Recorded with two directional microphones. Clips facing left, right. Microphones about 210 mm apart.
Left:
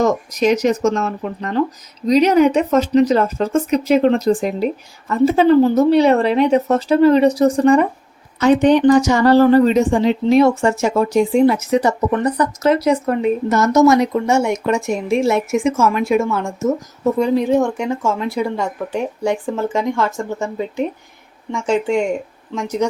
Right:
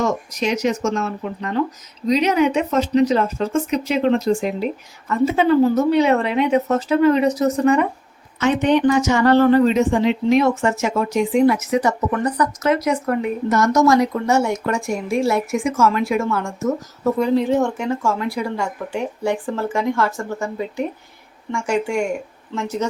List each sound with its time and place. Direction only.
0.0 s a woman's voice: 40° left (ahead or behind); by 22.9 s 15° left (ahead or behind)